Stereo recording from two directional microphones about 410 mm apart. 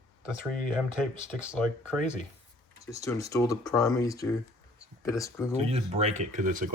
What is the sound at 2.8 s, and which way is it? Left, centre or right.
Speech, centre.